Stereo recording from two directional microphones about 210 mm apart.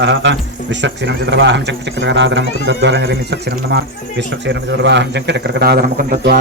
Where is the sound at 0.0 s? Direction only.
60° right (ahead or behind).